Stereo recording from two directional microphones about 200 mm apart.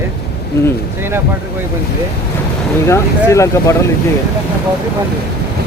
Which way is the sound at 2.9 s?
15° left (ahead or behind).